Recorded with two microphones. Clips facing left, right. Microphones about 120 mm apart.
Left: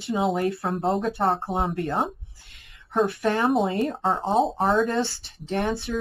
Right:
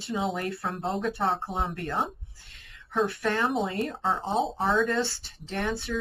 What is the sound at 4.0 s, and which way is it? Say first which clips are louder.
Speech: left 2 dB; 40° left (ahead or behind).